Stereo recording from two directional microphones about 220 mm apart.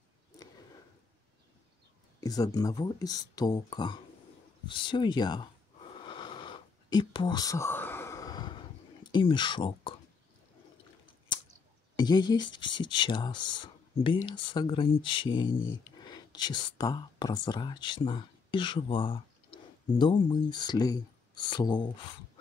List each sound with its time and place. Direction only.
2.1 s speech: 15° left (ahead or behind)
5.9 s a sound: 25° left (ahead or behind)
12.0 s speech: 20° left (ahead or behind)
15.4 s speech: 65° left (ahead or behind)
16.0 s speech: 20° left (ahead or behind)